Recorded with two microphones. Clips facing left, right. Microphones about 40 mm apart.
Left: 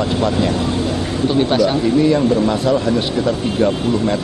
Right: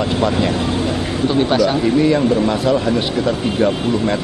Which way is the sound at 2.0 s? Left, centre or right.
Centre.